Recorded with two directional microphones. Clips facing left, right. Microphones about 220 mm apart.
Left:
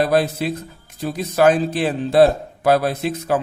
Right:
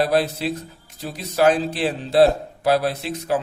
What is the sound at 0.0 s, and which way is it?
Speech, 50° left (ahead or behind).